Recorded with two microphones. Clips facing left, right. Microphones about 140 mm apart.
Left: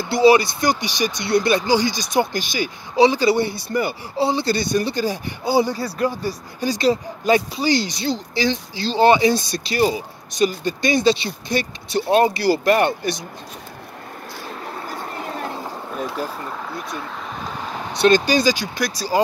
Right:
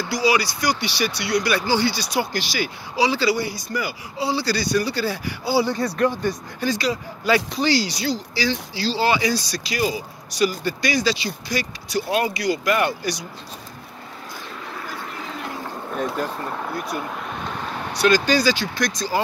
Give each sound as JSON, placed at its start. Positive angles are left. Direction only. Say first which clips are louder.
{"t": 0.0, "sound": "speech", "louder": "left 7 dB", "side_deg": 25}
{"t": 5.8, "sound": "speech", "louder": "right 2 dB", "side_deg": 30}
{"t": 6.0, "sound": "speech", "louder": "even", "side_deg": 10}
{"t": 6.8, "sound": "speech", "louder": "left 6 dB", "side_deg": 25}
{"t": 14.8, "sound": "vehicle", "louder": "left 2 dB", "side_deg": 40}
{"t": 17.9, "sound": "speech", "louder": "left 3 dB", "side_deg": 25}